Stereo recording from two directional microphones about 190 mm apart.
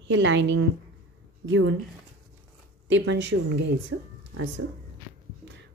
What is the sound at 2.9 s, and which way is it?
Speech, 70° right (ahead or behind).